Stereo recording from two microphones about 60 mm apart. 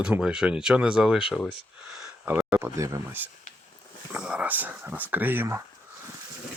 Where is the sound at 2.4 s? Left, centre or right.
Right.